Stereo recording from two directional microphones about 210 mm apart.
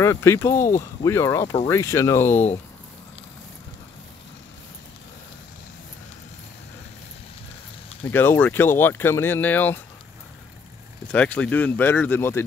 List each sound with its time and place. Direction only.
0.0 s speech: 15° left (ahead or behind)
8.1 s speech: 10° left (ahead or behind)
11.1 s speech: 5° left (ahead or behind)